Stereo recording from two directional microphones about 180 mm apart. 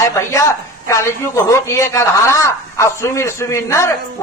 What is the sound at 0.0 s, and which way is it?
A man's voice, 15° left (ahead or behind).